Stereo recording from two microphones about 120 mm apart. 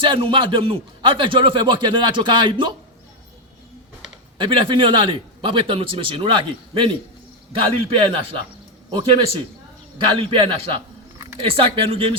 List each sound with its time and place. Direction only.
0.0 s a man's voice: 45° right (ahead or behind)
4.4 s a man's voice: 45° right (ahead or behind)